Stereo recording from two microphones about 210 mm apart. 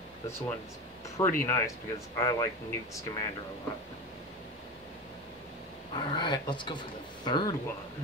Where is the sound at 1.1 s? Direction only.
10° left (ahead or behind).